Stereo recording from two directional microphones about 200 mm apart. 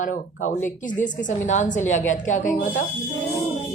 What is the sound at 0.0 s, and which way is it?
Speech, 40° left (ahead or behind).